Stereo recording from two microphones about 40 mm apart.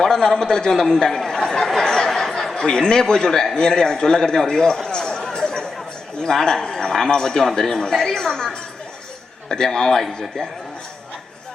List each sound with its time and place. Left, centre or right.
0.0 s a man's voice: centre
4.4 s a sound: centre
6.2 s speech: centre